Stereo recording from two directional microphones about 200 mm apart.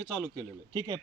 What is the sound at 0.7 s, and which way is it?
Speech, 20° right (ahead or behind).